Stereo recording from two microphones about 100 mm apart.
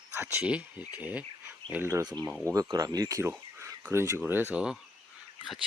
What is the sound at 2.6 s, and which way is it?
Speech, 40° right (ahead or behind).